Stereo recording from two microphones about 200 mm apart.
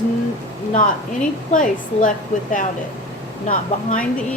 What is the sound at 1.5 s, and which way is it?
A woman's voice, 40° left (ahead or behind).